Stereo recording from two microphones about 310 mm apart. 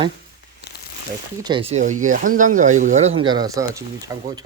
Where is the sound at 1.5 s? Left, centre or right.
Centre.